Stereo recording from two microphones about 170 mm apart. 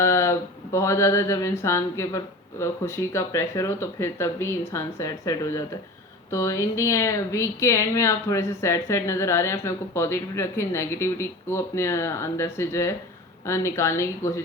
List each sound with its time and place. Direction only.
0.0 s speech: 15° left (ahead or behind)